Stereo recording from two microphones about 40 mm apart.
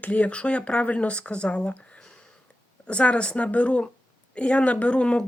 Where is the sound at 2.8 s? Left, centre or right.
Left.